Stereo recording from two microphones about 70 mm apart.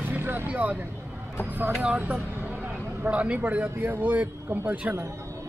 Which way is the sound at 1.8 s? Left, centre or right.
Centre.